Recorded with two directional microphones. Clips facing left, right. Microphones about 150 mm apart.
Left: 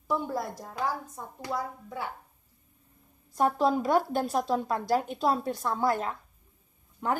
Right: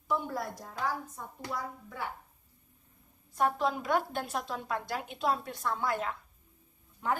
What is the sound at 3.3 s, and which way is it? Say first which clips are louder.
A woman's voice: left 5 dB; 35° left (ahead or behind).